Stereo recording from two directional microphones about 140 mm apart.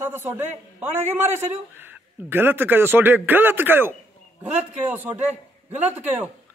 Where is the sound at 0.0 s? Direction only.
15° right (ahead or behind).